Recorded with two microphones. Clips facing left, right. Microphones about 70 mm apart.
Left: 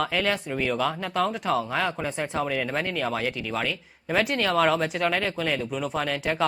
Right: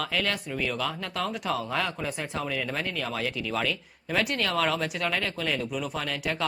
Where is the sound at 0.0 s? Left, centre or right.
Centre.